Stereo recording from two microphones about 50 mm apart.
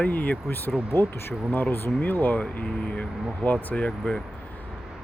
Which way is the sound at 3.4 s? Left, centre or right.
Left.